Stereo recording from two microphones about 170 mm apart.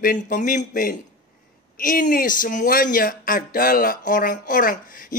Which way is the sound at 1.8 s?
55° left (ahead or behind).